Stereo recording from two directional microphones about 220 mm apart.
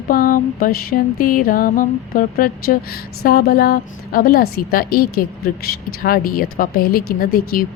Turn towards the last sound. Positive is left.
turn(degrees=40)  # may be behind; listen again after turning